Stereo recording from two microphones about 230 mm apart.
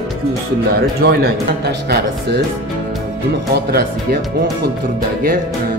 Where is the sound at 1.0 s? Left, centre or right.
Right.